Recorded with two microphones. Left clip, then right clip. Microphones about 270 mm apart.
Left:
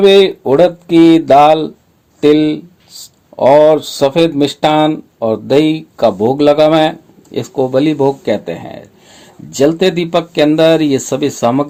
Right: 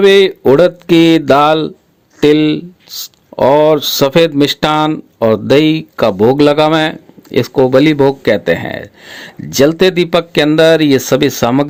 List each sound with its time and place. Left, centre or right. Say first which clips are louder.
0.0 s speech: even; right